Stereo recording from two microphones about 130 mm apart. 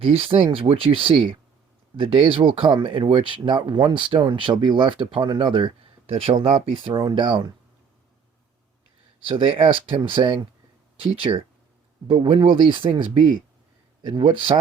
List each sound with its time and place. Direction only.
0.0 s speech: 45° right (ahead or behind)
9.2 s speech: 45° right (ahead or behind)
14.1 s speech: 40° right (ahead or behind)